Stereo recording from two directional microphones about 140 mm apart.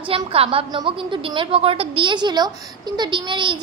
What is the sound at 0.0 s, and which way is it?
A child's voice, 40° right (ahead or behind).